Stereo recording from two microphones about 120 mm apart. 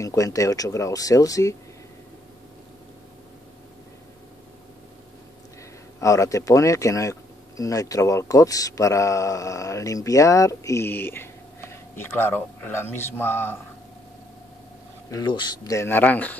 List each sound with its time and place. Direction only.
0.0 s speech: 25° left (ahead or behind)
5.9 s speech: 25° left (ahead or behind)
15.0 s speech: 35° left (ahead or behind); by 16.3 s 15° left (ahead or behind)